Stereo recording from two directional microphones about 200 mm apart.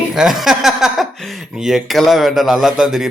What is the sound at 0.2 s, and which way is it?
A man's voice, centre (ahead or behind).